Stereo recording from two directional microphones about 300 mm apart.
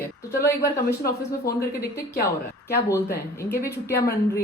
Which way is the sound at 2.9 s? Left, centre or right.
Centre.